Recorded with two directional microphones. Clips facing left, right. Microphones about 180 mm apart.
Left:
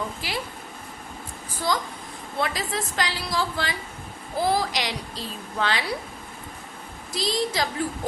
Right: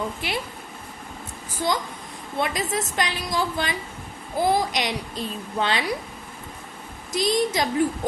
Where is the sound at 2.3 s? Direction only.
20° right (ahead or behind).